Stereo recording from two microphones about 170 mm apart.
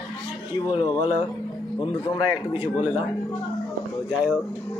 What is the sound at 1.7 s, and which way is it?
Speech, 30° left (ahead or behind).